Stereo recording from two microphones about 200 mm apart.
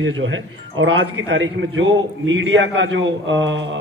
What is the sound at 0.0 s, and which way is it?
A man's voice, 70° right (ahead or behind).